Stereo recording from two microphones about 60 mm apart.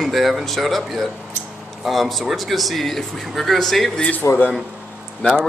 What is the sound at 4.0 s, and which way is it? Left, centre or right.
Speech, left.